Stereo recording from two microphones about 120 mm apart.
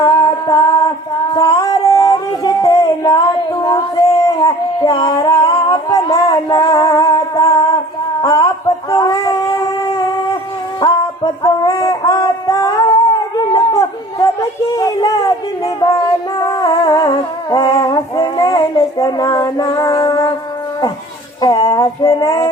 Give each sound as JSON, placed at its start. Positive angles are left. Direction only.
{"t": 0.0, "sound": "music", "side_deg": 35}
{"t": 1.3, "sound": "a sound", "side_deg": 40}
{"t": 5.6, "sound": "music", "side_deg": 35}
{"t": 8.2, "sound": "a sound", "side_deg": 35}
{"t": 10.8, "sound": "music", "side_deg": 35}
{"t": 11.4, "sound": "synthetic singing", "side_deg": 30}
{"t": 14.8, "sound": "a sound", "side_deg": 30}
{"t": 16.4, "sound": "music", "side_deg": 35}
{"t": 21.4, "sound": "child singing", "side_deg": 30}